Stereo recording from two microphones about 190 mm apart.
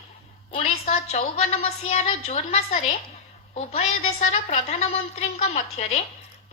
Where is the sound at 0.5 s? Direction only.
35° left (ahead or behind).